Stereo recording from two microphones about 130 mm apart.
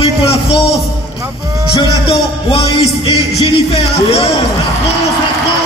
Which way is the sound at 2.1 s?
40° left (ahead or behind).